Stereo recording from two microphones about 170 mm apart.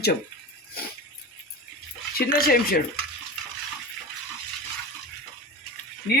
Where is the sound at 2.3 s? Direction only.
60° left (ahead or behind).